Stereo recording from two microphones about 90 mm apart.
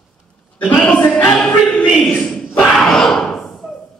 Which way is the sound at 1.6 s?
10° left (ahead or behind).